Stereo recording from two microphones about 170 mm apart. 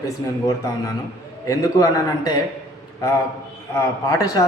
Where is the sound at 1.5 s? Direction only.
20° left (ahead or behind).